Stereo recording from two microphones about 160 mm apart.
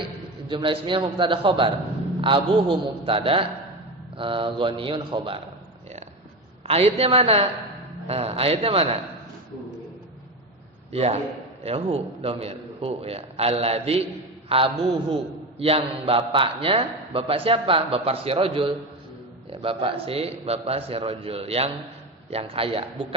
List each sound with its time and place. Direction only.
0.4 s a man's voice: 35° right (ahead or behind)
6.7 s a man's voice: 40° right (ahead or behind)
10.9 s a man's voice: 40° right (ahead or behind)